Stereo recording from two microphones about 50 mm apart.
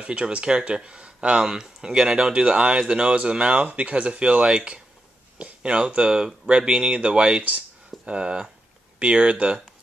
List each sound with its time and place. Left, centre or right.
0.0 s speech: right